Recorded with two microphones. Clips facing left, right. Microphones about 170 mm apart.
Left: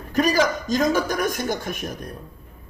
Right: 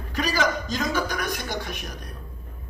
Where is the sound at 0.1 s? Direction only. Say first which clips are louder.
Left 5 dB; 45° left (ahead or behind).